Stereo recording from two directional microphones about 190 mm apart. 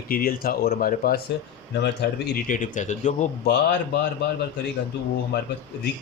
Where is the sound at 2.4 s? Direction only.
45° left (ahead or behind).